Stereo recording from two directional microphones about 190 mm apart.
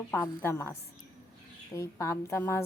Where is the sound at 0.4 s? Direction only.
15° left (ahead or behind).